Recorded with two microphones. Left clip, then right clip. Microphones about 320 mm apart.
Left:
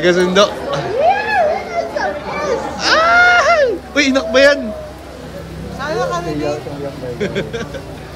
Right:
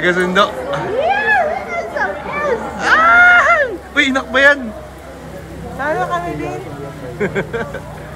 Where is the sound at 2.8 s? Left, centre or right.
Centre.